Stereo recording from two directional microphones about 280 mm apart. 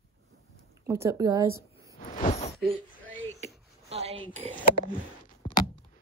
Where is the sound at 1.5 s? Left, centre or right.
Left.